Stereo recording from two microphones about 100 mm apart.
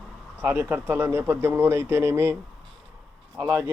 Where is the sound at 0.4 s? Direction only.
20° right (ahead or behind).